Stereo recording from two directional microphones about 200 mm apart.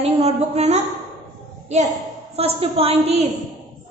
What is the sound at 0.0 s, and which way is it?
Speech, 30° right (ahead or behind).